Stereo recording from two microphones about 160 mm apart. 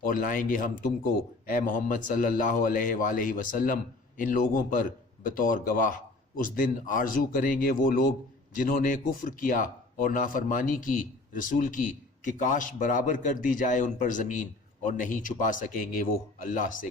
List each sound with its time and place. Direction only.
0.0 s speech: 60° left (ahead or behind)